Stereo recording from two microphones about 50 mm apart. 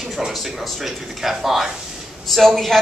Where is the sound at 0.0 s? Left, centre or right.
Centre.